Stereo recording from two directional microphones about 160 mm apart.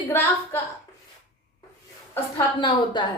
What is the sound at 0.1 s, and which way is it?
Speech, 15° left (ahead or behind).